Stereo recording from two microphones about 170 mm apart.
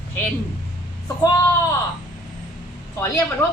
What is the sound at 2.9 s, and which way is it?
Speech, 15° left (ahead or behind).